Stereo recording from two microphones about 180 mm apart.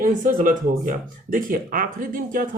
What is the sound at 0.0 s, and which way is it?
Speech, 50° right (ahead or behind).